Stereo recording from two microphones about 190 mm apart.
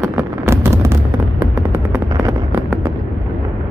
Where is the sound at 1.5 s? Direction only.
15° right (ahead or behind).